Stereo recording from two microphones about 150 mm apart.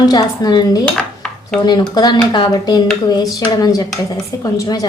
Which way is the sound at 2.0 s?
30° left (ahead or behind).